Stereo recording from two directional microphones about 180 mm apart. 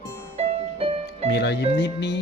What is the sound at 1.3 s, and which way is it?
Speech, 70° left (ahead or behind).